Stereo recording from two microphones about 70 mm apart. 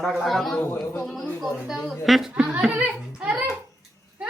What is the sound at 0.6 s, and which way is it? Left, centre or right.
Speech, left.